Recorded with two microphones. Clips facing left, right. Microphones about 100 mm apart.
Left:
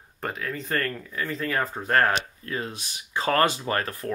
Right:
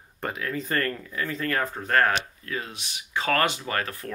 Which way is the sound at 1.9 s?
35° left (ahead or behind).